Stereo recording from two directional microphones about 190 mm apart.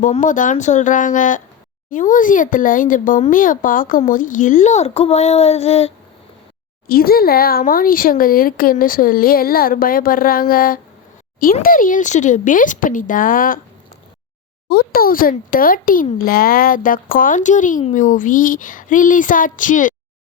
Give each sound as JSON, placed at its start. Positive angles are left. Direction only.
{"t": 0.0, "sound": "speech", "side_deg": 40}
{"t": 6.8, "sound": "speech", "side_deg": 50}
{"t": 14.7, "sound": "speech", "side_deg": 50}